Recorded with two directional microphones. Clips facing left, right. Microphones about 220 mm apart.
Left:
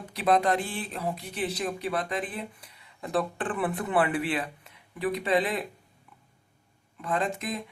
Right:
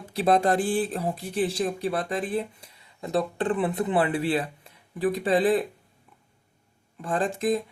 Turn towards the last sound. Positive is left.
turn(degrees=-30)  # may be behind; listen again after turning